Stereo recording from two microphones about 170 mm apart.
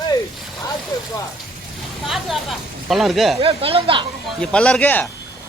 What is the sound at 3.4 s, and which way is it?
Speech, 35° right (ahead or behind).